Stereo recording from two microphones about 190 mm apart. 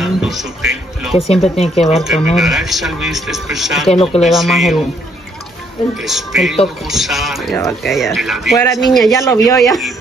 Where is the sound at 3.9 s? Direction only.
30° left (ahead or behind).